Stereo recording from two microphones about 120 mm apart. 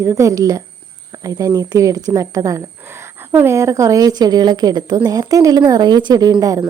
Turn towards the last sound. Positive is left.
turn(degrees=-30)  # may be behind; listen again after turning